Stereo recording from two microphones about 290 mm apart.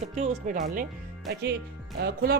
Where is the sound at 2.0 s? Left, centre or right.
Right.